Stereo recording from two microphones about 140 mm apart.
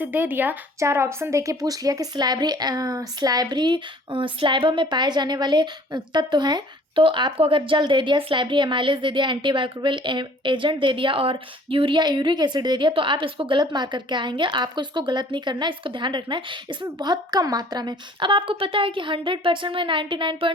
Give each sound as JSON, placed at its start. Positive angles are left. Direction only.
{"t": 0.0, "sound": "speech", "side_deg": -15}